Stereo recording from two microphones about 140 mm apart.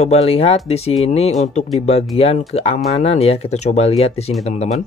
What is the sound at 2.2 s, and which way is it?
Speech, 45° left (ahead or behind).